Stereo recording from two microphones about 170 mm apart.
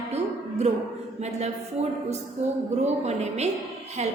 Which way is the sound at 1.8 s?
40° right (ahead or behind).